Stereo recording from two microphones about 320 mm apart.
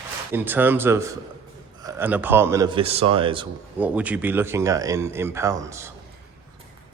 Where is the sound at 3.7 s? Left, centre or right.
Centre.